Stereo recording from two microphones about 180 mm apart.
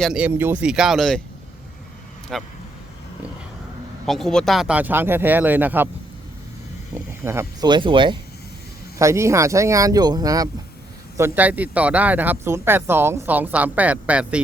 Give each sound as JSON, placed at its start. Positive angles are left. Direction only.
{"t": 0.0, "sound": "speech", "side_deg": -5}
{"t": 2.3, "sound": "speech", "side_deg": 0}
{"t": 4.0, "sound": "speech", "side_deg": 0}
{"t": 6.9, "sound": "speech", "side_deg": -15}
{"t": 9.0, "sound": "speech", "side_deg": -15}
{"t": 11.2, "sound": "speech", "side_deg": -10}